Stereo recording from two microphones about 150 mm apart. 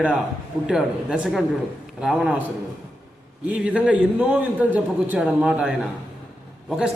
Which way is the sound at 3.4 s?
10° right (ahead or behind).